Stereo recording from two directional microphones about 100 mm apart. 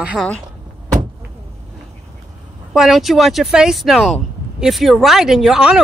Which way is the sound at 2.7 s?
5° right (ahead or behind).